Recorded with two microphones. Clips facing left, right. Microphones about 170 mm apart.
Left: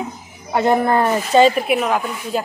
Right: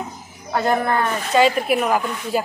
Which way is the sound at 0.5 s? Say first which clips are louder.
Left 4 dB; 20° left (ahead or behind).